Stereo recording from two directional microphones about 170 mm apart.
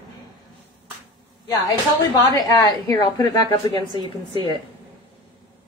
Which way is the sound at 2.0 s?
25° left (ahead or behind).